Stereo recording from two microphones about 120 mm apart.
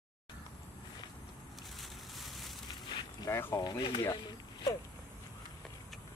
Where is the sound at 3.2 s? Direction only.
20° left (ahead or behind); by 4.2 s 40° left (ahead or behind).